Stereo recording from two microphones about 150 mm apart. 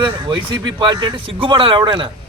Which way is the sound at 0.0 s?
30° right (ahead or behind).